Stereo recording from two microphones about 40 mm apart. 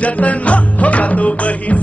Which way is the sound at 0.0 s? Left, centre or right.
Left.